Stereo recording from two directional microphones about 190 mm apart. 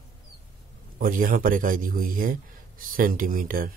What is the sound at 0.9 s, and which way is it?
Speech, 45° right (ahead or behind).